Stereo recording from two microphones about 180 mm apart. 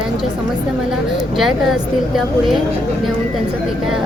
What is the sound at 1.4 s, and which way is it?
A woman's voice, centre (ahead or behind).